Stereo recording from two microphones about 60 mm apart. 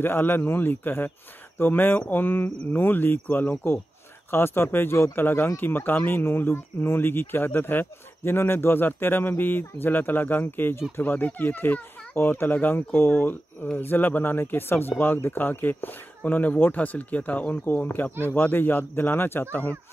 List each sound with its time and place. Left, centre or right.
0.0 s speech: left